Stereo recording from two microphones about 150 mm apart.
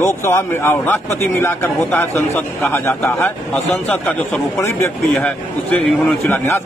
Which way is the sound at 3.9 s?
5° left (ahead or behind).